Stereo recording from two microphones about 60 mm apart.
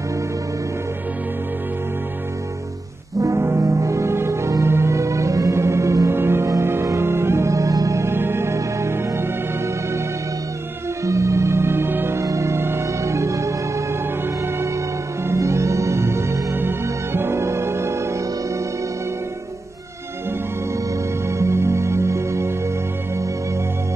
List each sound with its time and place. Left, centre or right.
3.2 s music: right
8.1 s music: right
11.1 s music: right
12.2 s music: right
15.2 s music: right
21.3 s music: right